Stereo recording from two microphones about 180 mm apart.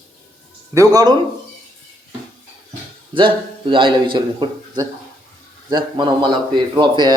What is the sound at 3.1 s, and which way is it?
A man's voice, 25° right (ahead or behind).